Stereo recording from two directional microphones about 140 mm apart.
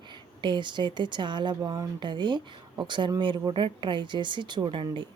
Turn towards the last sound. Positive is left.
turn(degrees=-35)  # may be behind; listen again after turning